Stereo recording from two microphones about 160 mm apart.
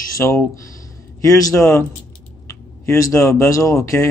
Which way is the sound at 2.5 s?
20° left (ahead or behind).